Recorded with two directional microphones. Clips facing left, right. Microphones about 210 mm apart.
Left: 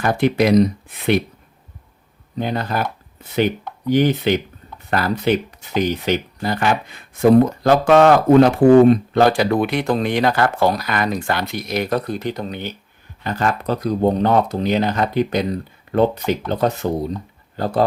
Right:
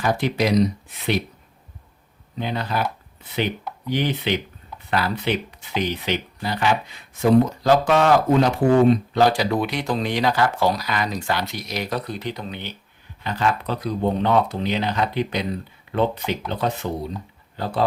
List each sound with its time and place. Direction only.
0.0 s speech: 55° left (ahead or behind)
2.4 s speech: 45° left (ahead or behind)
3.8 s speech: 45° left (ahead or behind)